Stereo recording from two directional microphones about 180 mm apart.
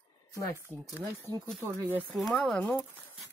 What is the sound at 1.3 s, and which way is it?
Speech, 10° left (ahead or behind).